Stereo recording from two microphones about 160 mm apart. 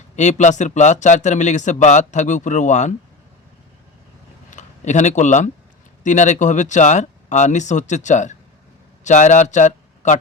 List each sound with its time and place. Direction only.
0.2 s speech: 50° left (ahead or behind)
4.5 s speech: 50° left (ahead or behind)